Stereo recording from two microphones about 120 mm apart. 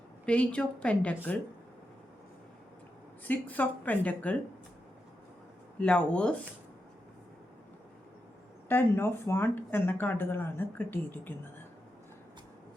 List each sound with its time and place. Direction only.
0.3 s speech: 10° left (ahead or behind)
3.2 s speech: 15° left (ahead or behind)
5.8 s speech: 10° left (ahead or behind)
8.7 s speech: 20° left (ahead or behind)